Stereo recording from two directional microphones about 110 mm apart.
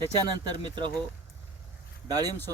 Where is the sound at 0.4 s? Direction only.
40° right (ahead or behind).